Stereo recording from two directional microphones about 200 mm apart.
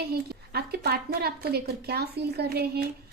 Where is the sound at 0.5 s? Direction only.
55° right (ahead or behind).